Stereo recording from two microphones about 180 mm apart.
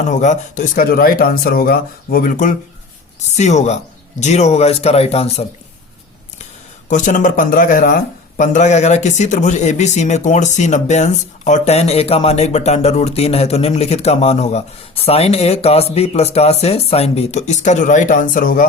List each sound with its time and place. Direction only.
0.1 s speech: 40° left (ahead or behind)